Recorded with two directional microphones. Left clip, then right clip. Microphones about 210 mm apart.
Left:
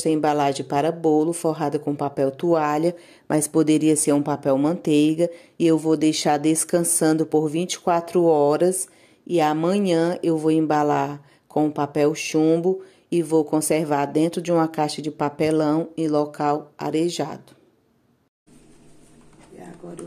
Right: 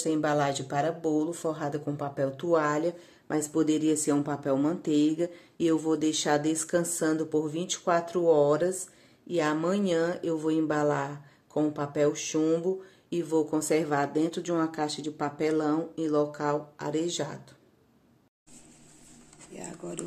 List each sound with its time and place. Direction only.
0.0 s speech: 30° left (ahead or behind)